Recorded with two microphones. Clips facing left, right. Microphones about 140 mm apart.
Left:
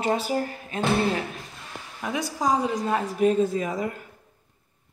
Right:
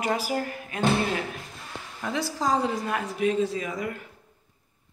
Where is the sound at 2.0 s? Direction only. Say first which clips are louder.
Left 2 dB; 15° left (ahead or behind).